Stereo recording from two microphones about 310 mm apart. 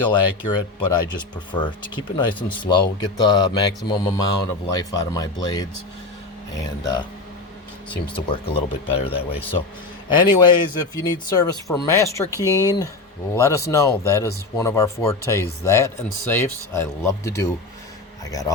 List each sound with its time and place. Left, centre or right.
0.1 s speech: centre
2.1 s speech: centre